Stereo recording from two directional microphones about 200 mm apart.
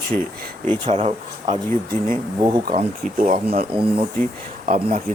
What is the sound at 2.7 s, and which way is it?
Speech, 35° right (ahead or behind).